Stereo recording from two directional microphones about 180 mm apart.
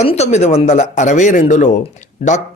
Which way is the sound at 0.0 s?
35° left (ahead or behind).